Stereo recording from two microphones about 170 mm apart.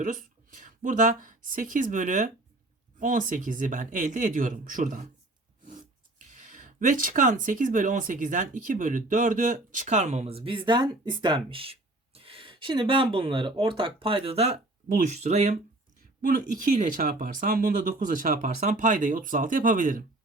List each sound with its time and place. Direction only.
0.0 s speech: 50° right (ahead or behind)
6.1 s speech: 50° right (ahead or behind)
16.8 s speech: 50° right (ahead or behind)